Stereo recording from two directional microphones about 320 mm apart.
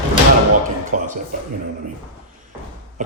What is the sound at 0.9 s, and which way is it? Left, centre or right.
Speech, right.